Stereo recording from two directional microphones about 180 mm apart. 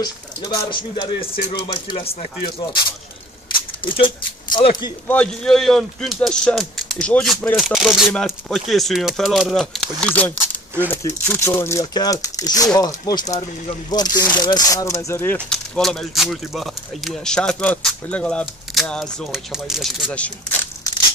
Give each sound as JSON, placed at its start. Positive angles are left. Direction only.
{"t": 0.0, "sound": "speech", "side_deg": 20}
{"t": 3.8, "sound": "speech", "side_deg": 30}
{"t": 5.0, "sound": "speech", "side_deg": 5}